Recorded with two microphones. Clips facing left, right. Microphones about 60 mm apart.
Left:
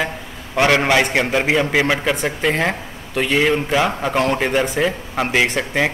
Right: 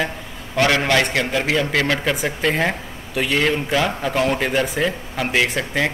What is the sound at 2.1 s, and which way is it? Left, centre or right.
A man's voice, centre.